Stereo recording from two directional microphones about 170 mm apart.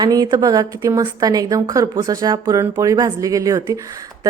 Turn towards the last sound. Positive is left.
turn(degrees=-20)  # may be behind; listen again after turning